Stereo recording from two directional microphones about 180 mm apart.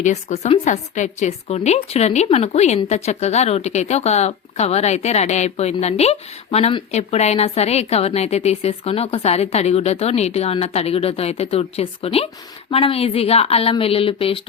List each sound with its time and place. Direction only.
0.0 s a woman's voice: 40° left (ahead or behind)